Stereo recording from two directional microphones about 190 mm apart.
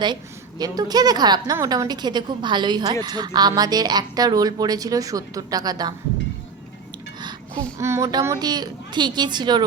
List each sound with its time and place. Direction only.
0.6 s a woman's voice: 20° right (ahead or behind)
7.2 s a woman's voice: 25° right (ahead or behind)